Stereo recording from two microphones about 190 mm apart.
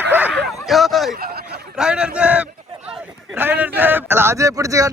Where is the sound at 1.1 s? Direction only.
50° right (ahead or behind).